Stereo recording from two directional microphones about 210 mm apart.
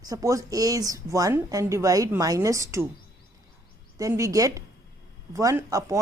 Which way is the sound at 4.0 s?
15° right (ahead or behind).